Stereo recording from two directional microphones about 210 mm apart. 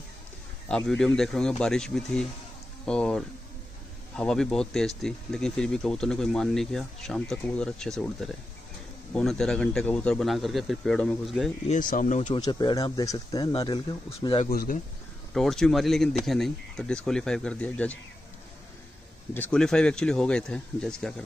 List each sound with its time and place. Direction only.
0.7 s speech: 5° left (ahead or behind)
11.6 s speech: 40° left (ahead or behind)
12.4 s speech: 20° left (ahead or behind)
14.5 s speech: 45° left (ahead or behind)
15.3 s speech: centre (ahead or behind)
19.3 s speech: 5° left (ahead or behind)